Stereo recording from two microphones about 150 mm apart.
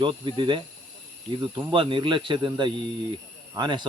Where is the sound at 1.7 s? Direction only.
35° right (ahead or behind).